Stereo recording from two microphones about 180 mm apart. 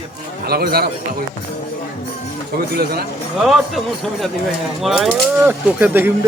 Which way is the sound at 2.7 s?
60° right (ahead or behind).